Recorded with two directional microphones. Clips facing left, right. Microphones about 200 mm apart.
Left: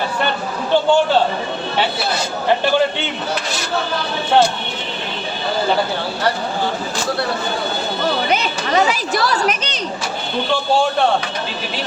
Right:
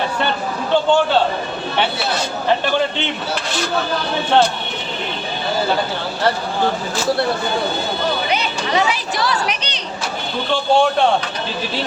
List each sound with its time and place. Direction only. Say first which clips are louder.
8.3 s speech: left 1 dB; 45° left (ahead or behind)